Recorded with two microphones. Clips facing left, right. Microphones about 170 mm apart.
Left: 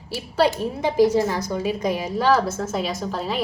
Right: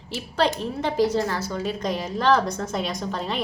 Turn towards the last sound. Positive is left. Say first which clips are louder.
# left 2 dB
turn(degrees=5)  # may be behind; listen again after turning